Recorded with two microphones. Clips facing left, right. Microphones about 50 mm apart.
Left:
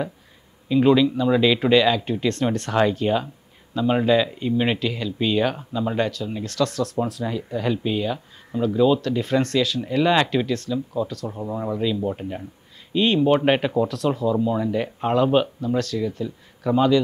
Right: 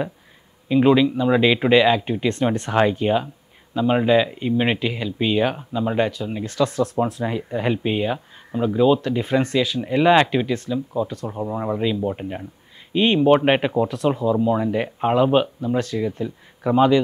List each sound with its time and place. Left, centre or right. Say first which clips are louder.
0.7 s speech: right 1 dB; centre